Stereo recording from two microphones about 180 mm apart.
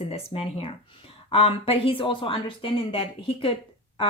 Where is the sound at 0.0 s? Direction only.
35° left (ahead or behind).